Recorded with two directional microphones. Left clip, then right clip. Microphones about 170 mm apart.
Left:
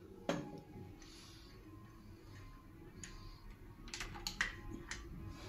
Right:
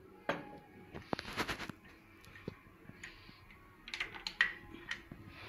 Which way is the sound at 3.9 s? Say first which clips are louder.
Right 5 dB; 15° left (ahead or behind).